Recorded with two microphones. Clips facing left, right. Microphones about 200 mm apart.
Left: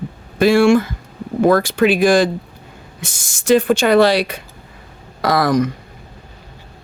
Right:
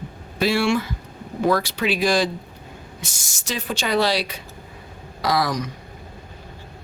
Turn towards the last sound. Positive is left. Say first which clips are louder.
# left 7 dB
turn(degrees=55)  # may be behind; listen again after turning